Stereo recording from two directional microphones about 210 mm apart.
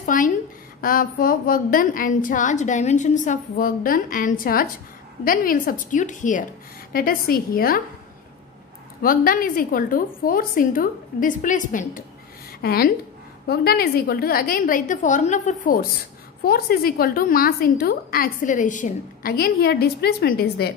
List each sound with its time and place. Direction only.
0.0 s a sound: 40° left (ahead or behind)
0.7 s a woman's voice: 45° left (ahead or behind)
9.0 s a woman's voice: 45° left (ahead or behind)